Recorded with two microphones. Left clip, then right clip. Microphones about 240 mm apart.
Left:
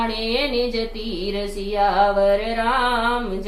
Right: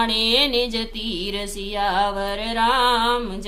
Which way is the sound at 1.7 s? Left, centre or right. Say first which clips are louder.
Left 4 dB; right.